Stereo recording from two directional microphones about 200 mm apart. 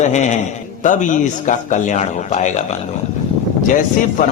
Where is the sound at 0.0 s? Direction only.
35° left (ahead or behind).